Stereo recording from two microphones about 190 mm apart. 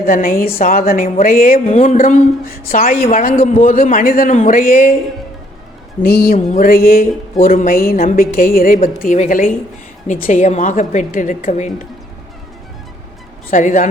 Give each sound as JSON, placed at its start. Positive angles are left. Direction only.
{"t": 0.0, "sound": "a woman's voice", "side_deg": 50}
{"t": 6.0, "sound": "a woman's voice", "side_deg": 50}
{"t": 13.5, "sound": "a woman's voice", "side_deg": 40}